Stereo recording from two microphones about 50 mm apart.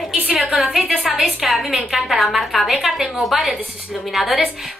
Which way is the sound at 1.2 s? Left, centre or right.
Centre.